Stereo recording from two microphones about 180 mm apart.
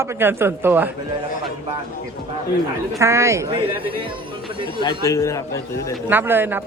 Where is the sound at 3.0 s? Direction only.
15° right (ahead or behind).